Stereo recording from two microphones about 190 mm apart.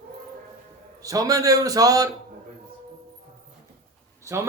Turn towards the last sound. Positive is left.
turn(degrees=-15)  # may be behind; listen again after turning